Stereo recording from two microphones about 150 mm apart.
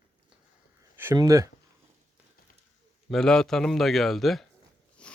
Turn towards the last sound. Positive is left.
turn(degrees=5)  # may be behind; listen again after turning